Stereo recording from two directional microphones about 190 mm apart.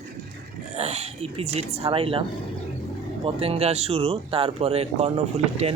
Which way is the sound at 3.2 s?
30° right (ahead or behind).